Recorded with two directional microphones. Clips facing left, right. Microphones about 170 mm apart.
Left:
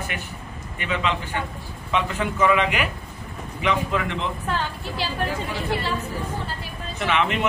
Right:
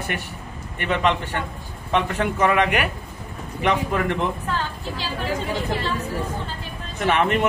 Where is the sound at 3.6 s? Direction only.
55° right (ahead or behind).